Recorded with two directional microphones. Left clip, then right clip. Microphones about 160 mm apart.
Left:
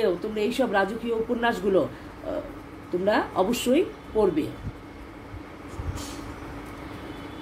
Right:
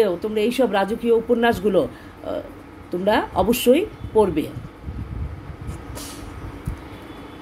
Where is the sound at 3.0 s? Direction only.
85° right.